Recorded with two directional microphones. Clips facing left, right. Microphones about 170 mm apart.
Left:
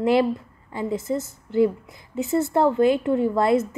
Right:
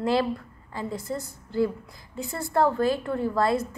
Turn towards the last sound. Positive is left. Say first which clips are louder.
# left 5 dB
turn(degrees=20)  # may be behind; listen again after turning